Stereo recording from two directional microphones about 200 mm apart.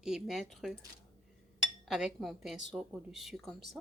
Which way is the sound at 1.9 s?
Centre (ahead or behind).